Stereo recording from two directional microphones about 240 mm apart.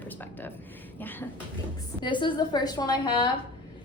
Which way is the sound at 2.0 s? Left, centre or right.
Centre.